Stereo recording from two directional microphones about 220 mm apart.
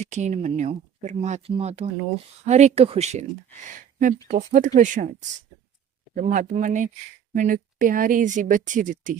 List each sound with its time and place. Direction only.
0.0 s speech: 30° right (ahead or behind)
4.3 s speech: 35° right (ahead or behind)
6.1 s speech: 35° right (ahead or behind)